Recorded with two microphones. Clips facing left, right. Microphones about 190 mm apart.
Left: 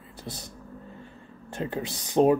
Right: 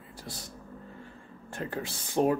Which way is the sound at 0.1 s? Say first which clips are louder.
Left 4 dB; 20° left (ahead or behind).